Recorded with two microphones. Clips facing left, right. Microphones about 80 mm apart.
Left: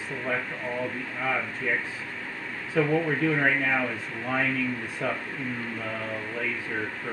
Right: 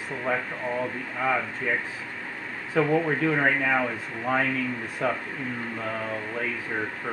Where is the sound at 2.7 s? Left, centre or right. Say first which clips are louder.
Right 1 dB; right.